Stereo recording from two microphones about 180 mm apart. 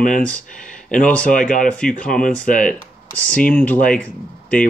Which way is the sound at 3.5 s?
10° left (ahead or behind).